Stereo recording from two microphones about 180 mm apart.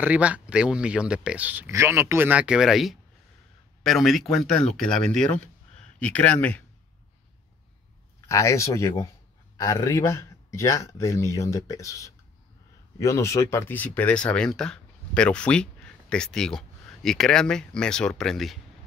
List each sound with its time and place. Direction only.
0.0 s speech: 5° right (ahead or behind); by 6.6 s 10° left (ahead or behind)
8.3 s speech: 15° left (ahead or behind)